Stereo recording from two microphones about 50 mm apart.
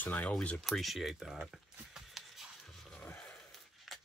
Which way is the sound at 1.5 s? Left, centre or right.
Centre.